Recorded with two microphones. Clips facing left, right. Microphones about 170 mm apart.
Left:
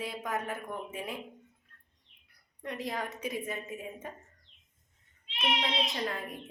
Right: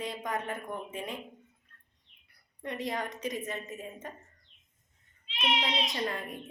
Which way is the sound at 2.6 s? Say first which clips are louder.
Right 1 dB; centre (ahead or behind).